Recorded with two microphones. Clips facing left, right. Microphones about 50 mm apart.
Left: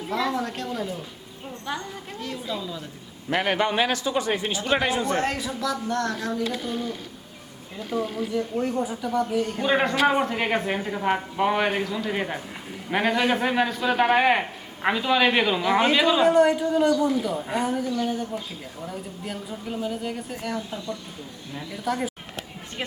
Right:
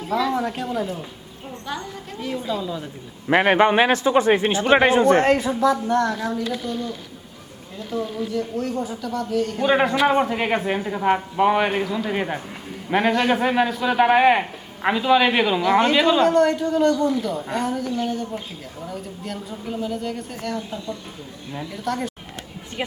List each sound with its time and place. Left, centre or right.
0.1 s a man's voice: centre
2.2 s a man's voice: centre
3.2 s a man's voice: right
6.6 s a man's voice: centre
8.3 s speech: left
9.6 s a man's voice: centre
17.8 s a man's voice: right
18.9 s a woman's voice: centre
21.7 s a woman's voice: centre